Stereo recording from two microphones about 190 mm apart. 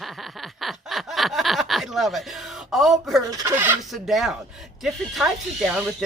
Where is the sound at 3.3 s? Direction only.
20° right (ahead or behind); by 4.4 s centre (ahead or behind).